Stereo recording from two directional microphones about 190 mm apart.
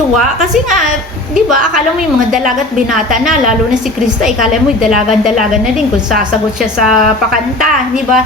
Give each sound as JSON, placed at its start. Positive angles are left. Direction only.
{"t": 4.2, "sound": "a woman's voice", "side_deg": 0}
{"t": 6.6, "sound": "a woman's voice", "side_deg": -5}